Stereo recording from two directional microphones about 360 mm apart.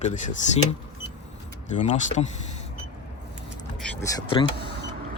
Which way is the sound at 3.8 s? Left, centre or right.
Centre.